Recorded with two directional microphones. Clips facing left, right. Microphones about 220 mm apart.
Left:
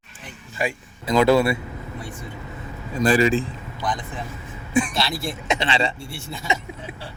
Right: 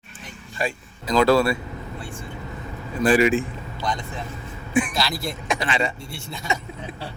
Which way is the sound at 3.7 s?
15° left (ahead or behind).